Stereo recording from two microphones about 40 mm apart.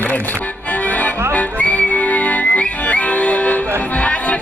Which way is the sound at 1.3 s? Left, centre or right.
Left.